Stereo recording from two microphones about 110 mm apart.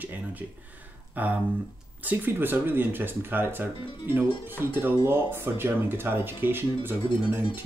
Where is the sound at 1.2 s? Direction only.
15° right (ahead or behind).